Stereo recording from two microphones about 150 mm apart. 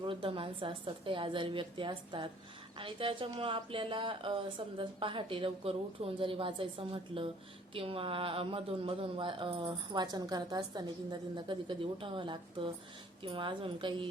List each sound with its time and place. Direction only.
0.0 s speech: 35° right (ahead or behind)